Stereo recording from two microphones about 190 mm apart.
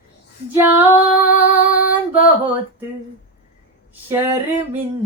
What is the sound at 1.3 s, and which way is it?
Music, 45° left (ahead or behind).